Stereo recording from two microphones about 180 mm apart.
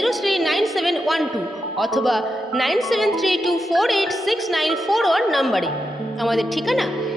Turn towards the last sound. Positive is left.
turn(degrees=0)  # may be behind; listen again after turning